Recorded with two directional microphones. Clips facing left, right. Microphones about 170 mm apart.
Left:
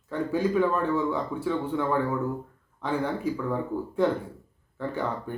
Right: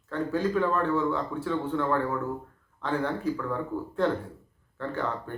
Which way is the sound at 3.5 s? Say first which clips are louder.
Left 2 dB; 15° left (ahead or behind).